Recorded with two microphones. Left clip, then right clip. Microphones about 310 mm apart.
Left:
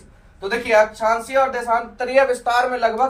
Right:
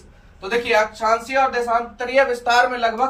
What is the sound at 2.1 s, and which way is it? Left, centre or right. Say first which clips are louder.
Speech: even; left.